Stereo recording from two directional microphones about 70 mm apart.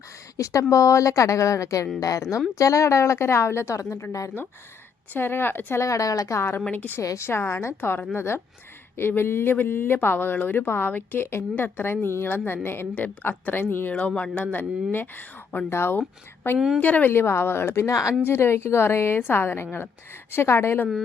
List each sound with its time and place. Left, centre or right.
0.3 s a woman's voice: left
5.1 s speech: left
5.8 s a woman's voice: left
6.7 s speech: left
7.0 s a woman's voice: left
7.3 s speech: left
12.9 s speech: left
16.6 s a woman's voice: centre
16.8 s speech: left